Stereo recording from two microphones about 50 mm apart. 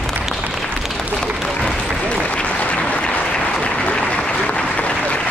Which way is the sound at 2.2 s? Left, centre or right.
Left.